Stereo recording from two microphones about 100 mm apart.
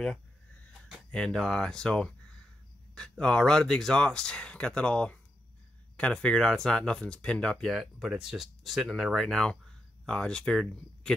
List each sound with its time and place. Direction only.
1.1 s speech: 5° left (ahead or behind)